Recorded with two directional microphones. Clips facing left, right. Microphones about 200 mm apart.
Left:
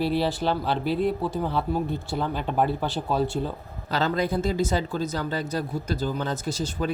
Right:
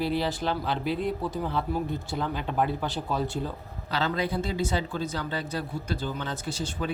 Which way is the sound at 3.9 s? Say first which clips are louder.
Left 3 dB; 45° left (ahead or behind).